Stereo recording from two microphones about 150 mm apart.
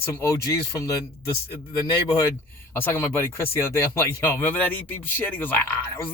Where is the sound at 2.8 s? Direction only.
15° left (ahead or behind).